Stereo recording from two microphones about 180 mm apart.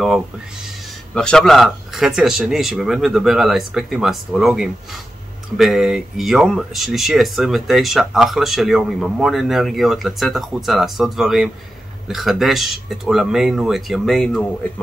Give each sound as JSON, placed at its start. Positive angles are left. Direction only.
{"t": 1.1, "sound": "speech", "side_deg": 5}